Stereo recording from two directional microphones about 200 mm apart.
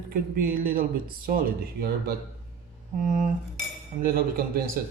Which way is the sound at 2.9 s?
40° right (ahead or behind).